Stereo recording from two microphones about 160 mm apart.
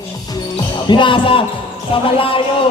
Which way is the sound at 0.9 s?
30° left (ahead or behind).